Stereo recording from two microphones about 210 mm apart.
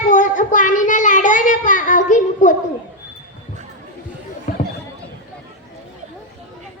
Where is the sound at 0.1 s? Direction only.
40° left (ahead or behind).